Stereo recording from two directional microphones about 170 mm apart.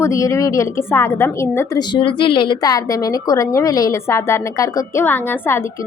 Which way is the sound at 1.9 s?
30° left (ahead or behind).